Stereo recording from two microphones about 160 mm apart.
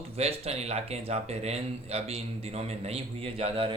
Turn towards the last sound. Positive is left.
turn(degrees=-35)  # may be behind; listen again after turning